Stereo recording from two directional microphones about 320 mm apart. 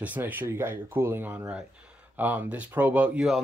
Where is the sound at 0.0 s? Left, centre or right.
Centre.